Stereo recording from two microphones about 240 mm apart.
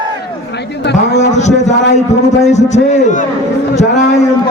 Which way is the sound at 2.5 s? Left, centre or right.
Left.